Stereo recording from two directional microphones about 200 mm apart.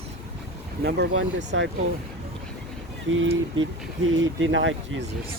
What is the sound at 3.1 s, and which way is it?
Speech, 75° right (ahead or behind).